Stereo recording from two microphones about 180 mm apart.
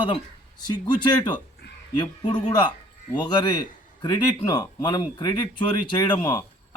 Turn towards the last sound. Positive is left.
turn(degrees=25)  # may be behind; listen again after turning